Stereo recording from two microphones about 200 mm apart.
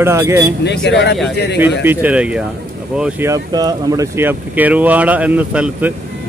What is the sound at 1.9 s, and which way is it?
Speech, 10° right (ahead or behind).